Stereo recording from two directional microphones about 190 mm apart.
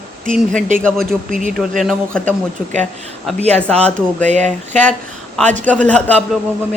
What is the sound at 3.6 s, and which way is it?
Speech, 5° left (ahead or behind).